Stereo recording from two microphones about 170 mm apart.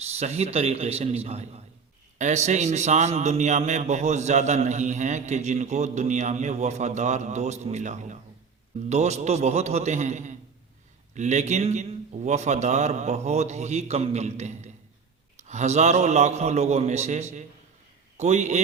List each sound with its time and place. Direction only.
0.0 s a man's voice: 40° right (ahead or behind)